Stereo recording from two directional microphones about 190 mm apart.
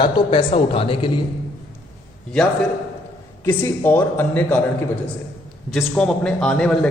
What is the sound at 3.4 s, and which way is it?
A man's voice, 10° left (ahead or behind).